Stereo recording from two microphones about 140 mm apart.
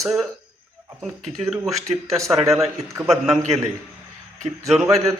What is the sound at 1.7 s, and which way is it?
Speech, 50° right (ahead or behind).